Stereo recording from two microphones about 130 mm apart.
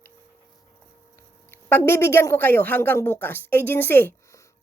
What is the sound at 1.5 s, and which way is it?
A woman's voice, 15° left (ahead or behind).